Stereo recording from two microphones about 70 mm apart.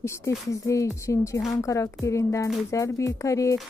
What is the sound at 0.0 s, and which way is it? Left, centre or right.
Speech, left.